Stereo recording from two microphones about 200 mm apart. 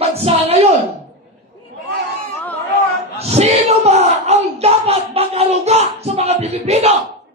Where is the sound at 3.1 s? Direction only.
35° right (ahead or behind).